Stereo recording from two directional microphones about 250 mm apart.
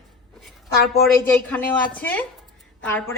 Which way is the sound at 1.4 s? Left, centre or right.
Centre.